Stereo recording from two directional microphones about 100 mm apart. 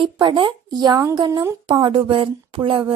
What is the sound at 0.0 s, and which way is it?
Speech, 50° right (ahead or behind).